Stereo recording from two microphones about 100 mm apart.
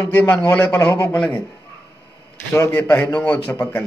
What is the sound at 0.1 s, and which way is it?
Speech, 15° left (ahead or behind).